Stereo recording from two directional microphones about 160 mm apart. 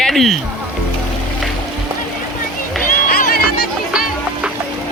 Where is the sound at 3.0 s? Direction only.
65° left (ahead or behind).